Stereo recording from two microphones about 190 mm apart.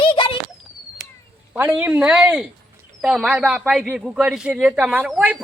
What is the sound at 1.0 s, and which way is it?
Whip, 55° right (ahead or behind).